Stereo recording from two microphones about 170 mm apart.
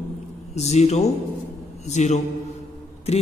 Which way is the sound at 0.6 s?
40° left (ahead or behind).